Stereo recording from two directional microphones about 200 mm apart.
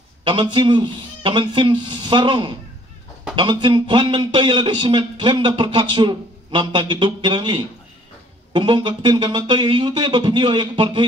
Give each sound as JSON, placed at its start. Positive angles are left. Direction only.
{"t": 0.3, "sound": "a man's voice", "side_deg": -25}